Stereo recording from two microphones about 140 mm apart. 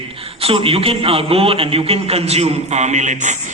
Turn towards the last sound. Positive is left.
turn(degrees=-60)  # may be behind; listen again after turning